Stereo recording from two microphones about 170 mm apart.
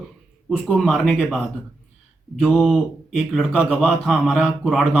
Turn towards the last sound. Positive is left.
turn(degrees=0)  # may be behind; listen again after turning